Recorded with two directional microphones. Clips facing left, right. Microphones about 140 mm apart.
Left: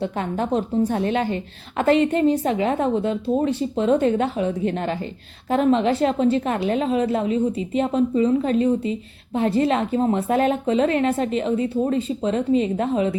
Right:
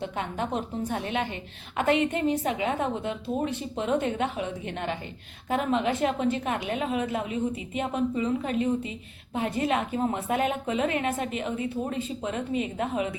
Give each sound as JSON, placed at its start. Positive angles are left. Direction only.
{"t": 0.0, "sound": "a woman's voice", "side_deg": 35}